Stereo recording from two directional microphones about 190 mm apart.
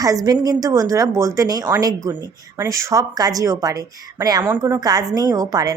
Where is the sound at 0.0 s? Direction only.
20° right (ahead or behind).